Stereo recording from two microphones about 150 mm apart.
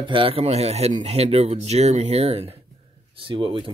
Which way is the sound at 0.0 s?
35° right (ahead or behind).